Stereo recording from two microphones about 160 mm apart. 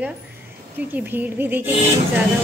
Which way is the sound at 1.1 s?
10° right (ahead or behind).